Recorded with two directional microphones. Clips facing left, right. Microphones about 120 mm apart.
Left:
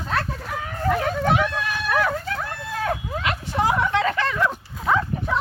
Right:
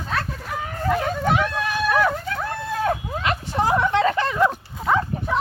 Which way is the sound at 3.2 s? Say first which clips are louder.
Right 1 dB; 35° right (ahead or behind).